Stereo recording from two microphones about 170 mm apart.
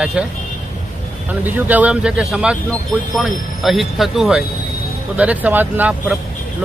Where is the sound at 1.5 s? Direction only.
10° right (ahead or behind).